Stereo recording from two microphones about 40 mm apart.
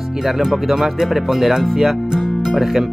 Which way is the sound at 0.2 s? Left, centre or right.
Centre.